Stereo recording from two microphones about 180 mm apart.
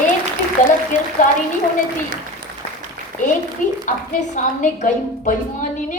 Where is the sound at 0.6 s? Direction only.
45° left (ahead or behind).